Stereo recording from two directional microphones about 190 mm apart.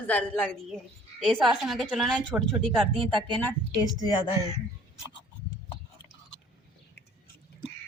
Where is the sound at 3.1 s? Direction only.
25° right (ahead or behind).